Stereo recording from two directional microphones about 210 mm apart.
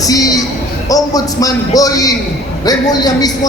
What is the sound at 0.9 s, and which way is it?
A man's voice, 15° left (ahead or behind).